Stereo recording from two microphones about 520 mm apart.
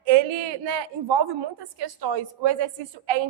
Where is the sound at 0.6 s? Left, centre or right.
Right.